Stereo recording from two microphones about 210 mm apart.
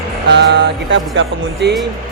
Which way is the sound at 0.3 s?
55° right (ahead or behind).